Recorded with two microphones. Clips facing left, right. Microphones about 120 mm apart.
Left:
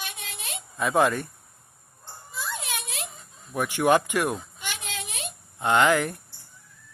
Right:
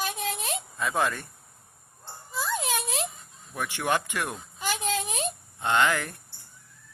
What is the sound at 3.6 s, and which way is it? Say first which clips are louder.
Speech: left 7 dB; 15° left (ahead or behind).